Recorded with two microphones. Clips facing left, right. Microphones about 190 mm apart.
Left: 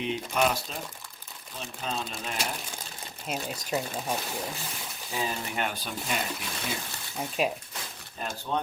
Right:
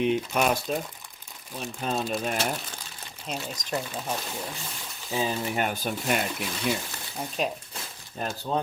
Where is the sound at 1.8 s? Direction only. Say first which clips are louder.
Right 7 dB; 50° right (ahead or behind).